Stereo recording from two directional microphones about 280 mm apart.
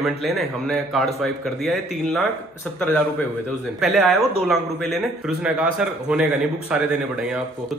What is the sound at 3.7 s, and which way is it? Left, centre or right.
A man's voice, centre.